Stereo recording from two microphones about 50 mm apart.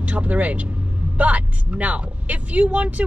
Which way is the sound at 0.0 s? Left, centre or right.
Right.